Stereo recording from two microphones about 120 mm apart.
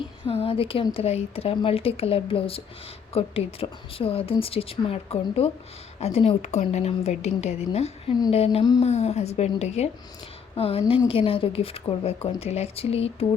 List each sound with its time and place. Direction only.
0.3 s a woman's voice: 50° left (ahead or behind)
10.5 s a woman's voice: 55° left (ahead or behind)